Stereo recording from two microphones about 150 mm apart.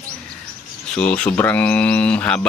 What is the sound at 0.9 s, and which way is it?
A man's voice, 10° left (ahead or behind).